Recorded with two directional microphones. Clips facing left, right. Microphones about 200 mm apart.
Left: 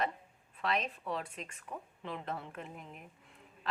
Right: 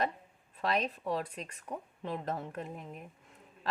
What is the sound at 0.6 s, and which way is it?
A woman's voice, 35° right (ahead or behind).